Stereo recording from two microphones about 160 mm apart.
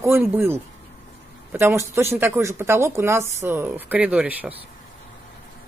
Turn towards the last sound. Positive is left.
turn(degrees=-10)  # may be behind; listen again after turning